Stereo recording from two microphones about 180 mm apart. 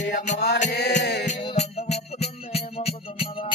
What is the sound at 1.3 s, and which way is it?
Music, 35° left (ahead or behind).